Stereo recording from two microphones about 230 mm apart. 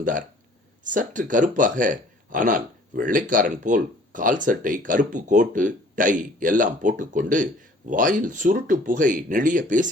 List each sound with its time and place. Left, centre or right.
0.0 s speech: right